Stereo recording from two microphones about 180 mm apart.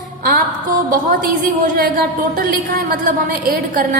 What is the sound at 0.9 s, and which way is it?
A woman's voice, 50° right (ahead or behind).